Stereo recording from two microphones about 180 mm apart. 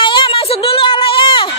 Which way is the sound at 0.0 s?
25° left (ahead or behind).